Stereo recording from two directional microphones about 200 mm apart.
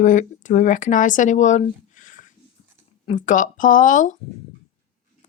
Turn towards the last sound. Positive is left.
turn(degrees=40)  # may be behind; listen again after turning